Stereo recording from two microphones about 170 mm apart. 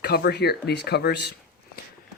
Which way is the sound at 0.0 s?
70° left (ahead or behind).